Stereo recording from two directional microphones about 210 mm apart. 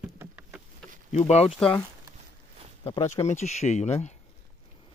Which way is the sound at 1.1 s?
30° left (ahead or behind).